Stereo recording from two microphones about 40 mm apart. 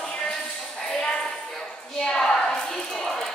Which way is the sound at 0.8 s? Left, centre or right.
Centre.